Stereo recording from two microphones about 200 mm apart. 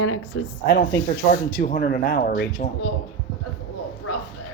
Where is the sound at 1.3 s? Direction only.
45° left (ahead or behind).